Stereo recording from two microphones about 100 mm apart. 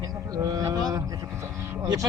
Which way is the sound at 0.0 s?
35° right (ahead or behind).